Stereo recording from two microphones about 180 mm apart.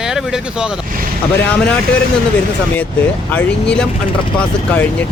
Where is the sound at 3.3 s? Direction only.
10° left (ahead or behind).